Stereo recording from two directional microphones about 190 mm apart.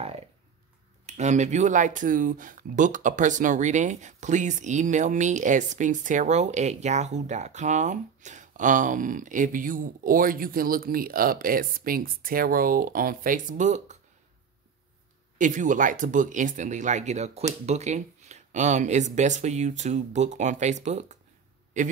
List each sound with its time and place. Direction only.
1.0 s speech: 35° right (ahead or behind)
15.3 s speech: 40° right (ahead or behind)